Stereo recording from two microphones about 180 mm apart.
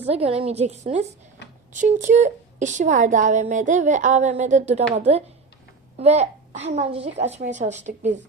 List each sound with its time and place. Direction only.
0.1 s a child's voice: 35° right (ahead or behind)